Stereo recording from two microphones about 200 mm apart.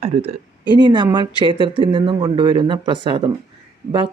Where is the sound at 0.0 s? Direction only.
30° right (ahead or behind).